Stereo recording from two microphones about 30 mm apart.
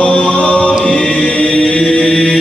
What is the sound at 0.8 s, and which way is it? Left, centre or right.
Mantra, left.